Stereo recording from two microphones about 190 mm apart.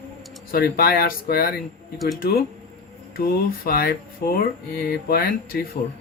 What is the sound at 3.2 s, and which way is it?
Speech, 50° left (ahead or behind).